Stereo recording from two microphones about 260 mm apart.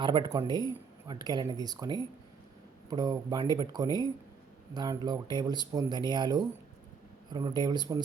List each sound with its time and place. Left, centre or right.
0.0 s speech: centre